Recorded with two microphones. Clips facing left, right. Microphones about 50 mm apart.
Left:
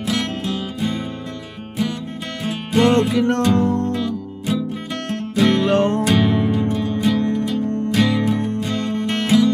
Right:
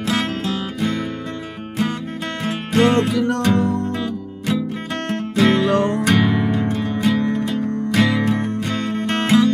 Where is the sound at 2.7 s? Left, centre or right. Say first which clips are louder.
Left 1 dB; right.